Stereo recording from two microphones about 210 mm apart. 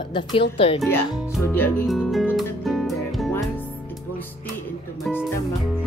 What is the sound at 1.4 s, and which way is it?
Music, 10° left (ahead or behind).